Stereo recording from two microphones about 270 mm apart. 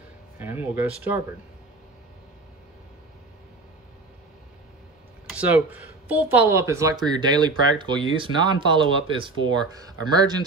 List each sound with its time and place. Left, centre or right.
0.4 s speech: centre
5.3 s speech: centre